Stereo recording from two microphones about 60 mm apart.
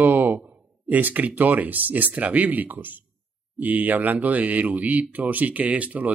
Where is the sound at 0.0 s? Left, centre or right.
Right.